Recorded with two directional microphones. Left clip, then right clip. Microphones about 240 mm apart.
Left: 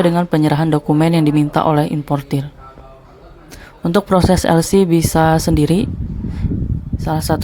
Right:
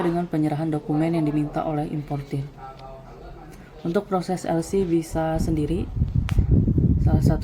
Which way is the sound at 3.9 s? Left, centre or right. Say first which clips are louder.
Left 11 dB; left.